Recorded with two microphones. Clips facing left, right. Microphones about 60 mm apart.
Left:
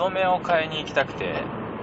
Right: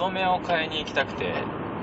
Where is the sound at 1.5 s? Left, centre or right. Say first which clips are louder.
Even; centre.